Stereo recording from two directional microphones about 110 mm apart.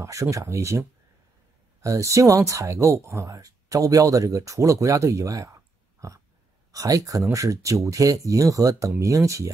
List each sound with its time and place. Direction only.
0.0 s speech: 30° right (ahead or behind)